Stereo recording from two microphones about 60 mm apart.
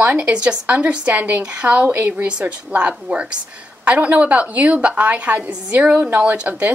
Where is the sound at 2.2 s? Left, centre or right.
Centre.